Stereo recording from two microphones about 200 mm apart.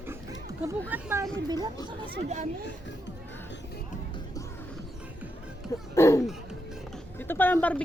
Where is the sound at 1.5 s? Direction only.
20° right (ahead or behind).